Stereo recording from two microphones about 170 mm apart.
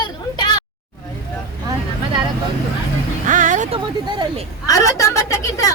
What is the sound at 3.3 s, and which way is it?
Music, 45° right (ahead or behind).